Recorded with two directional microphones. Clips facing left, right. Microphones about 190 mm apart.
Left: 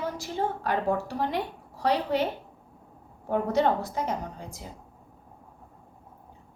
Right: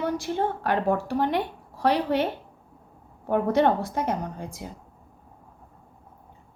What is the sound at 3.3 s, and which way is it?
A woman's voice, 60° right (ahead or behind).